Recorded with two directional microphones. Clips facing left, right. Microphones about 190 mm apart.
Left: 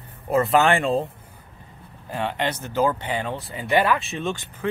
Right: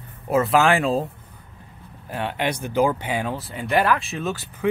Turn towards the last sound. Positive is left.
turn(degrees=-5)  # may be behind; listen again after turning